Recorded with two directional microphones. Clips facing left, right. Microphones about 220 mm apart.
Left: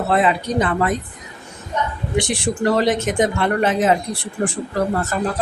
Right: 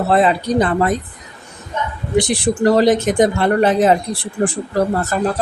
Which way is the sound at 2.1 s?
35° right (ahead or behind).